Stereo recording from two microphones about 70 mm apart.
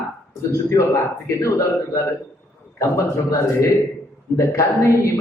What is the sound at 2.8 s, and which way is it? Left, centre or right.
A man's voice, left.